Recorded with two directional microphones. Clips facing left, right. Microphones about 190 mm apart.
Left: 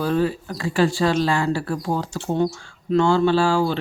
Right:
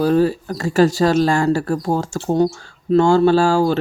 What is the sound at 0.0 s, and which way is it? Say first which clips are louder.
Speech: right 6 dB; 40° right (ahead or behind).